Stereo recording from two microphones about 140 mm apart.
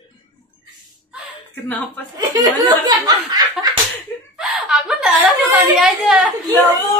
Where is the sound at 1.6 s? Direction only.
10° left (ahead or behind).